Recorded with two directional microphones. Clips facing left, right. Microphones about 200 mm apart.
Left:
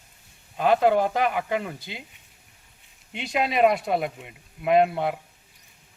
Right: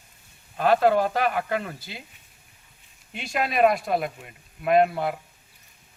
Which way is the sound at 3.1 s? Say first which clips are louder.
Left 1 dB; 20° left (ahead or behind).